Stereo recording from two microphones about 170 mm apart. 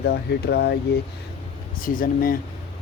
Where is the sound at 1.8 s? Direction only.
55° left (ahead or behind).